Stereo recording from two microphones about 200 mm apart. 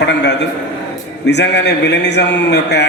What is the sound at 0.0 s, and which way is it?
A man's voice, 60° left (ahead or behind).